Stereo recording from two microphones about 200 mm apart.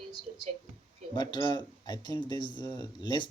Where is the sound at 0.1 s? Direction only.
25° left (ahead or behind).